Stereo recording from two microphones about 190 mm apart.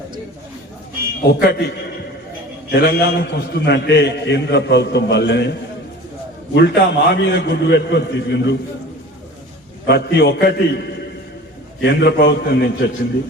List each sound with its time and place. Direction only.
1.3 s a man's voice: 55° left (ahead or behind)
9.8 s a man's voice: 60° left (ahead or behind)